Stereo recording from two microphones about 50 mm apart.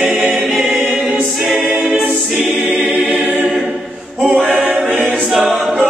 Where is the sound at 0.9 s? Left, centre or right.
Centre.